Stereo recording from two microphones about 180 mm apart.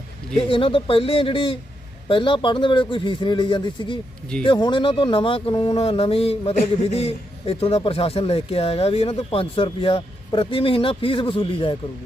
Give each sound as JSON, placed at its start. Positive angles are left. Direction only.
{"t": 0.3, "sound": "speech", "side_deg": 30}